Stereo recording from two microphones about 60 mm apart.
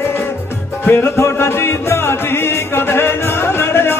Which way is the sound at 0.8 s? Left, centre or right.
Left.